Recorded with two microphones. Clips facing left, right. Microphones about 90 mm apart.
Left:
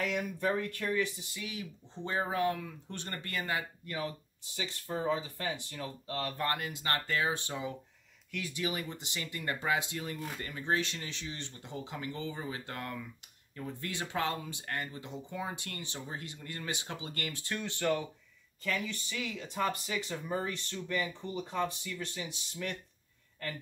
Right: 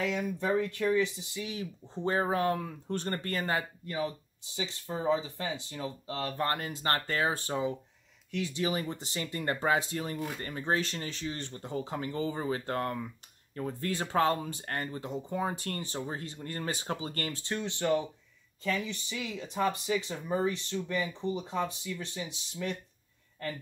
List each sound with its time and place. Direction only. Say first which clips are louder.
0.0 s speech: right 1 dB; 20° right (ahead or behind); by 3.9 s 40° right (ahead or behind)
4.9 s speech: right 3 dB; 20° right (ahead or behind)
6.4 s speech: right 5 dB; 35° right (ahead or behind)
8.3 s speech: right 5 dB; 25° right (ahead or behind)